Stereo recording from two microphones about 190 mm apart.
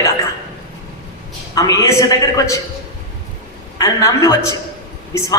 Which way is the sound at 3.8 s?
15° left (ahead or behind).